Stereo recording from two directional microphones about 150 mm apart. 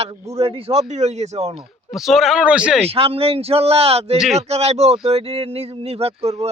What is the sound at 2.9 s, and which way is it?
A man's voice, 40° right (ahead or behind).